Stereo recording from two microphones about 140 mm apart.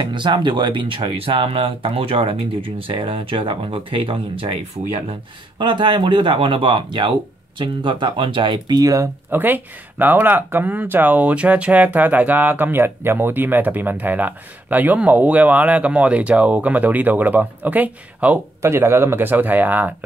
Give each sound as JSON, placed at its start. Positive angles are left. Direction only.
{"t": 0.0, "sound": "speech", "side_deg": -35}
{"t": 5.6, "sound": "speech", "side_deg": -35}